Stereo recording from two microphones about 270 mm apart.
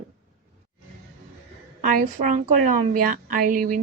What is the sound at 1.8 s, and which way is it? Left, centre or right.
A woman's voice, right.